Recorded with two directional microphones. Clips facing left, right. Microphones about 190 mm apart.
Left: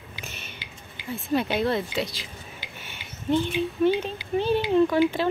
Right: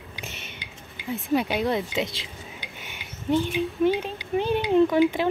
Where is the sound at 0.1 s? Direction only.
20° right (ahead or behind).